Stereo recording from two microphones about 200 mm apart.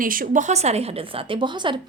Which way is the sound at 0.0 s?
45° right (ahead or behind).